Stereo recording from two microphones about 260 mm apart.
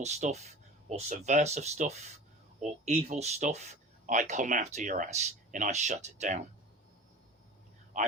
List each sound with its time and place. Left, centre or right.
0.0 s speech: right
7.9 s a man's voice: right